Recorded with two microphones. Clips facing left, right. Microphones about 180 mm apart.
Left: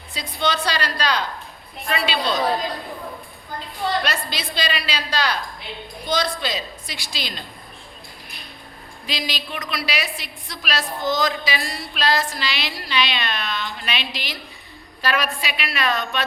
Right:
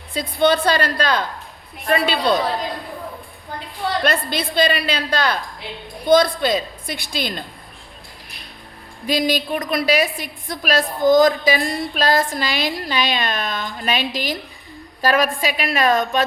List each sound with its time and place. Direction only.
0.1 s a woman's voice: 55° right (ahead or behind)
4.0 s a woman's voice: 55° right (ahead or behind)
9.0 s a woman's voice: 50° right (ahead or behind)